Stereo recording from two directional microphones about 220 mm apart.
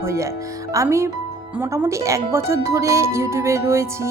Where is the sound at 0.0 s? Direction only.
15° right (ahead or behind).